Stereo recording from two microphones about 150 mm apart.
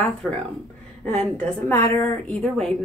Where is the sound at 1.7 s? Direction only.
20° left (ahead or behind).